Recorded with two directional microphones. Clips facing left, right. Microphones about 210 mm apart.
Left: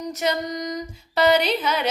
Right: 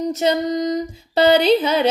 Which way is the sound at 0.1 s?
25° right (ahead or behind).